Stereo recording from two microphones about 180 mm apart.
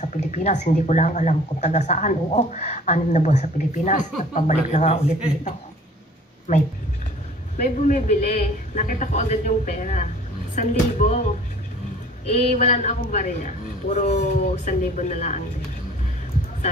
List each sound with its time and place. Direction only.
0.0 s speech: 40° left (ahead or behind)
7.5 s speech: 45° left (ahead or behind)
12.3 s speech: 35° left (ahead or behind)